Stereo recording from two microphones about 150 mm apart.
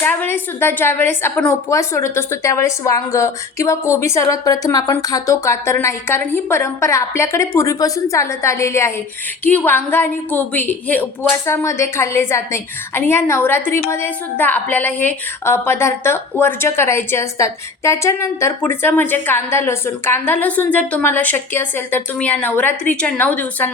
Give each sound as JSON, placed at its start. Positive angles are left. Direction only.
{"t": 0.0, "sound": "a woman's voice", "side_deg": 15}